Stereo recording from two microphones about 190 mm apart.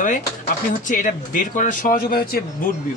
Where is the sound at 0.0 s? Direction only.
40° left (ahead or behind).